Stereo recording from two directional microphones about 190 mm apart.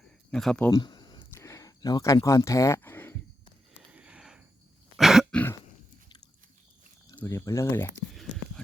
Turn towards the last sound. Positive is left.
turn(degrees=15)  # may be behind; listen again after turning